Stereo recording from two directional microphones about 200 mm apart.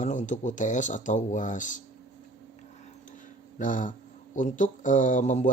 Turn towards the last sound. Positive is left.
turn(degrees=35)  # may be behind; listen again after turning